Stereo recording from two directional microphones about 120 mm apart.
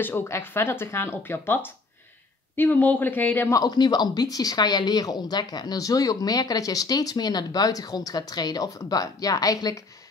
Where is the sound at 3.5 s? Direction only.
35° left (ahead or behind).